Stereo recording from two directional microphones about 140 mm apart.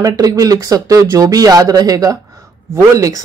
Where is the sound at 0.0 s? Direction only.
25° right (ahead or behind).